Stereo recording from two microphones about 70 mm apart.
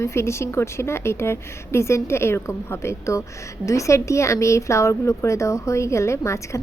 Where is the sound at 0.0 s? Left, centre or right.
Left.